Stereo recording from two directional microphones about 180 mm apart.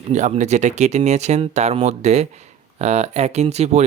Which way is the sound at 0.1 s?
40° right (ahead or behind).